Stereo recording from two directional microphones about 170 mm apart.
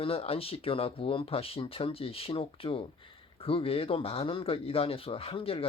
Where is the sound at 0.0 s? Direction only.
35° left (ahead or behind).